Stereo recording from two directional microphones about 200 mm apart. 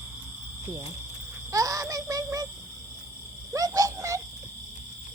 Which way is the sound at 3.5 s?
15° right (ahead or behind).